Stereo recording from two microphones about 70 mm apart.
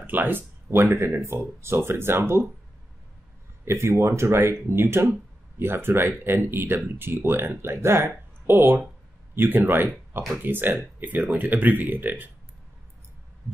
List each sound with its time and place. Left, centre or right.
0.0 s speech: right
3.6 s speech: right